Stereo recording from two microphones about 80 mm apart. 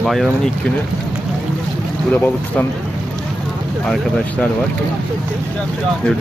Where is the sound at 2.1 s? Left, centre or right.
Centre.